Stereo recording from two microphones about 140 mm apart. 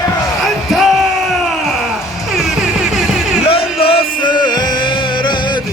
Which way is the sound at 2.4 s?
5° right (ahead or behind).